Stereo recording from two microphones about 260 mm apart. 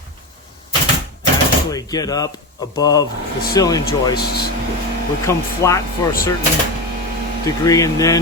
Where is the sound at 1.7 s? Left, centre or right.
Centre.